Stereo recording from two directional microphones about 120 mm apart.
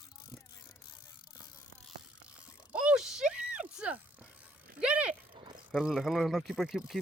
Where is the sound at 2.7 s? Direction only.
10° right (ahead or behind).